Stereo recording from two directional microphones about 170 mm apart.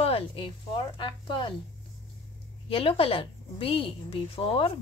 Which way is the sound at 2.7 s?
35° left (ahead or behind).